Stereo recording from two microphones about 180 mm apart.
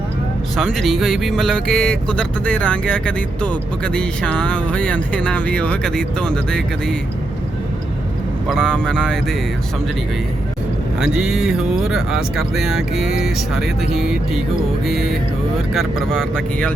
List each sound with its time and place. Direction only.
0.5 s speech: centre (ahead or behind)
8.4 s speech: 5° left (ahead or behind)
11.0 s speech: 5° right (ahead or behind)